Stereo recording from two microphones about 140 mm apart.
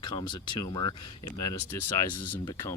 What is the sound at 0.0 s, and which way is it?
Speech, 30° left (ahead or behind).